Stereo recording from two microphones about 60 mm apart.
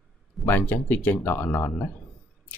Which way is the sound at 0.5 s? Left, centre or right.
Left.